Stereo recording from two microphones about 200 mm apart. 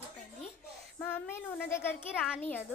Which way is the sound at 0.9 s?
10° left (ahead or behind).